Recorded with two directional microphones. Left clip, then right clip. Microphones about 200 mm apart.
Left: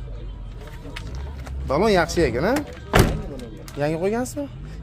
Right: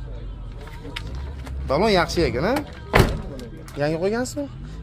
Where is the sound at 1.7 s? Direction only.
10° left (ahead or behind).